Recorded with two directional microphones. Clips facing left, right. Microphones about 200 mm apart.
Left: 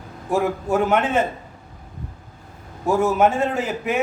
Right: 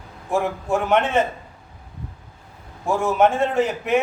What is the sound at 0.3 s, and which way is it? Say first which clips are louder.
Speech: left 1 dB; 5° left (ahead or behind).